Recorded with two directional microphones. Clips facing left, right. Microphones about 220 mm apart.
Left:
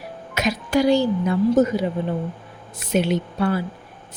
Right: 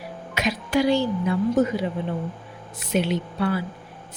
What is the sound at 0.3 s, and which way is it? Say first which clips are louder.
Speech: left 2 dB; 40° left (ahead or behind).